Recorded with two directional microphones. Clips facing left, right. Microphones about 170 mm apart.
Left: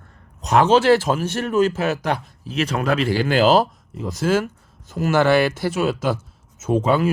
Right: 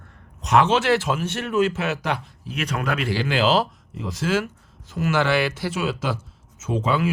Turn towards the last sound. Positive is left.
turn(degrees=45)  # may be behind; listen again after turning